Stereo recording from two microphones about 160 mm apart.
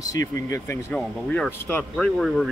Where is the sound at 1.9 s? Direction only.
Centre (ahead or behind).